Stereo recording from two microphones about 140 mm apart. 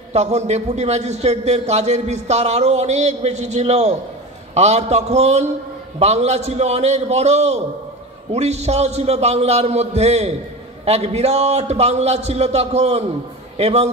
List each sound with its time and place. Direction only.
0.1 s a man's voice: 50° right (ahead or behind)